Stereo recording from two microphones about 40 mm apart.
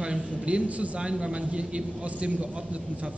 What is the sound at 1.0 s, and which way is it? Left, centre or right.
A man's voice, right.